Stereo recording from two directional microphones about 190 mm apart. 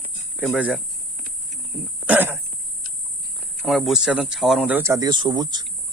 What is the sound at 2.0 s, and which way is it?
Throat clearing, 10° right (ahead or behind).